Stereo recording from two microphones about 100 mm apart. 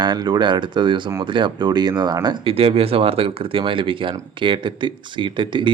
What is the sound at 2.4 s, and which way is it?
Speech, 70° right (ahead or behind).